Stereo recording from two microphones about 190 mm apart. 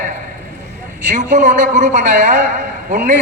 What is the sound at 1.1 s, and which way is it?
A man's voice, 40° right (ahead or behind).